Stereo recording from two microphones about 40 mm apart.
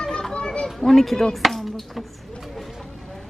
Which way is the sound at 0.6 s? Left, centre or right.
Centre.